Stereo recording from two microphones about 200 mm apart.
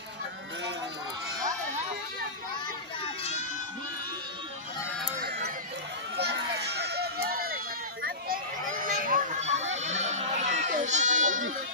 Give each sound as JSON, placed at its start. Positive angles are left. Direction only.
{"t": 6.1, "sound": "run", "side_deg": -55}
{"t": 8.8, "sound": "a sound", "side_deg": -40}
{"t": 9.8, "sound": "goat", "side_deg": -35}